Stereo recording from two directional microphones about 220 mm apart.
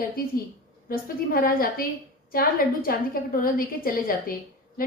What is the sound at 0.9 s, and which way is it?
A woman's voice, 40° left (ahead or behind).